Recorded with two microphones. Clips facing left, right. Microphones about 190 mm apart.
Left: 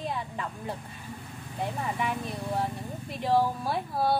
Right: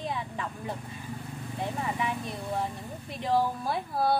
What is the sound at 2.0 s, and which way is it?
Speech, centre (ahead or behind).